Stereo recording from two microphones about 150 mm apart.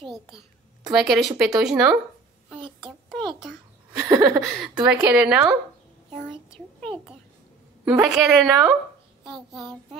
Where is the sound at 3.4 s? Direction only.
Centre (ahead or behind).